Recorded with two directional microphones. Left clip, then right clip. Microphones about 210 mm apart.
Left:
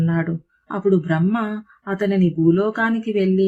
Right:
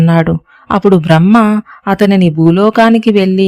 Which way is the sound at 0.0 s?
50° right (ahead or behind).